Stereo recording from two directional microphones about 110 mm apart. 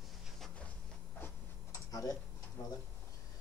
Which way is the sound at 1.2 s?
30° left (ahead or behind).